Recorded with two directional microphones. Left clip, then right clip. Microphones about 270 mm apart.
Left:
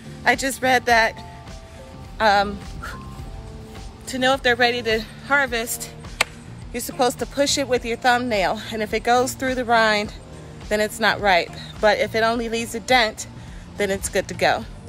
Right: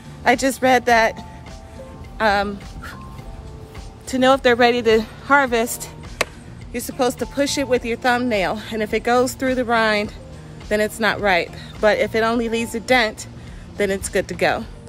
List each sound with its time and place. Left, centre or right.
0.2 s speech: centre
4.1 s speech: centre
6.7 s speech: centre